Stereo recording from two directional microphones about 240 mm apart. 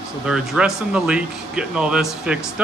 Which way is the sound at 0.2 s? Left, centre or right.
Centre.